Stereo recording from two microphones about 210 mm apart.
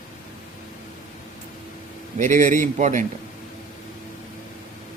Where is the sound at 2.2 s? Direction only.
35° right (ahead or behind).